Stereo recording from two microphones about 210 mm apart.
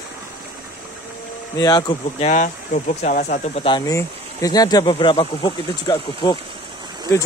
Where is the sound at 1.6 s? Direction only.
20° left (ahead or behind).